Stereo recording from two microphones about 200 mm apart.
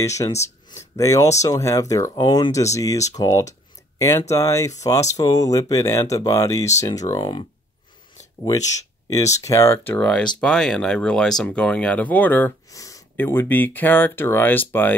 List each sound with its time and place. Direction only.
0.0 s speech: 15° left (ahead or behind)
9.1 s speech: 15° left (ahead or behind)